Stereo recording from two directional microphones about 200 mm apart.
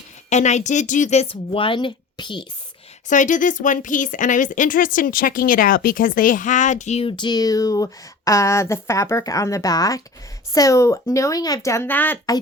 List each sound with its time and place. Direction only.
0.3 s speech: 35° left (ahead or behind)
3.1 s speech: 40° left (ahead or behind); by 12.4 s 15° left (ahead or behind)